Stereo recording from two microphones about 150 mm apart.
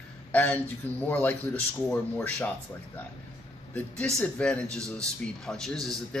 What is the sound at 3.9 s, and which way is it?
A man's voice, 5° left (ahead or behind).